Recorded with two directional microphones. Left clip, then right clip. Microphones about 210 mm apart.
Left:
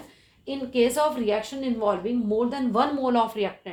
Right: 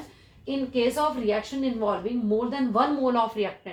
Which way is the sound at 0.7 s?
50° left (ahead or behind).